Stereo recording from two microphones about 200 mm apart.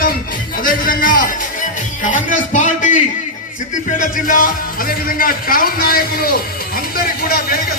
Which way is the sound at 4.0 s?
45° left (ahead or behind).